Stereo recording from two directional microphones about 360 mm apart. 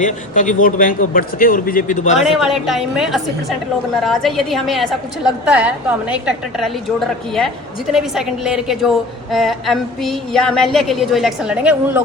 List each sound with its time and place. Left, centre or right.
0.0 s a man's voice: left
2.1 s a woman's voice: centre
7.9 s a woman's voice: centre